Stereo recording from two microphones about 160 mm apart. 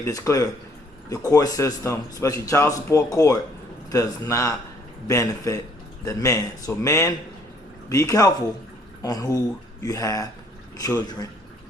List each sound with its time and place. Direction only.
0.0 s speech: 20° left (ahead or behind)